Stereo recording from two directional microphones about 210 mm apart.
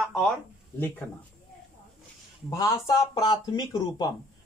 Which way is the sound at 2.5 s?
15° left (ahead or behind).